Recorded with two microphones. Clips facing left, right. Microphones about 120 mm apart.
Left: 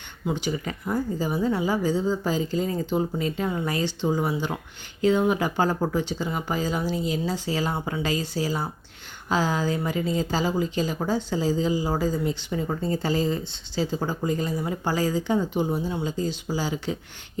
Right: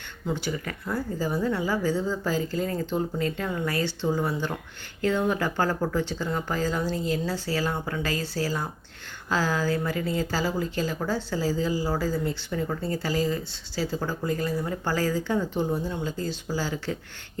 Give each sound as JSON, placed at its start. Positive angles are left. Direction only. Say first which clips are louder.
{"t": 0.3, "sound": "a woman's voice", "louder": "left 2 dB", "side_deg": 15}